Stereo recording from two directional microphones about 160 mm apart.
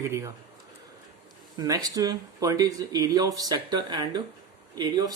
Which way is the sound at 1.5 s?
25° right (ahead or behind).